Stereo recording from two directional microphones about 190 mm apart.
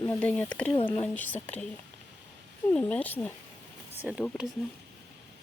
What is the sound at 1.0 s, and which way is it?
Speech, 10° left (ahead or behind).